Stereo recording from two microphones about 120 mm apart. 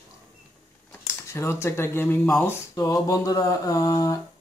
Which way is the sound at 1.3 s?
20° left (ahead or behind).